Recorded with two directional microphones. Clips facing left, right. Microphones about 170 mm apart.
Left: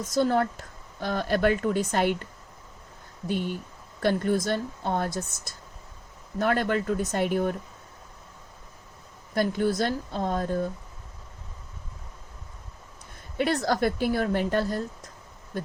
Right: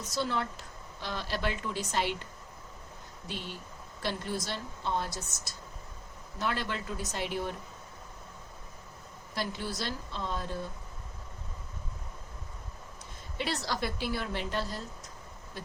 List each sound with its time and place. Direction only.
0.0 s a woman's voice: 50° left (ahead or behind)
3.2 s a woman's voice: 50° left (ahead or behind)
9.3 s a woman's voice: 50° left (ahead or behind)
13.3 s a woman's voice: 55° left (ahead or behind)
15.5 s a sound: 50° left (ahead or behind)